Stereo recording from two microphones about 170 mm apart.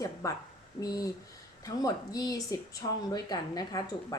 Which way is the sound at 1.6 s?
20° left (ahead or behind).